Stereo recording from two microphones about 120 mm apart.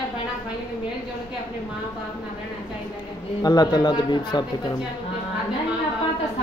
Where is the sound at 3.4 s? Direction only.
35° left (ahead or behind).